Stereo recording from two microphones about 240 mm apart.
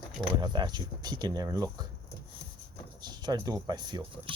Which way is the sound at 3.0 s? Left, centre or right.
Centre.